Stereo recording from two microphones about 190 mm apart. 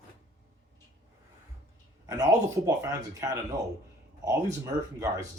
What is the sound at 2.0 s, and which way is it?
A man's voice, 20° right (ahead or behind).